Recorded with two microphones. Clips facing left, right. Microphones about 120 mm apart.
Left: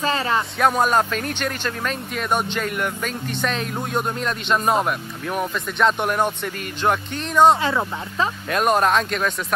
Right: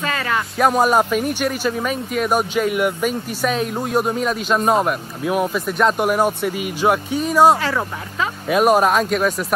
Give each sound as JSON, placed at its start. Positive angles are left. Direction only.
{"t": 0.0, "sound": "music", "side_deg": 30}
{"t": 0.6, "sound": "speech", "side_deg": -5}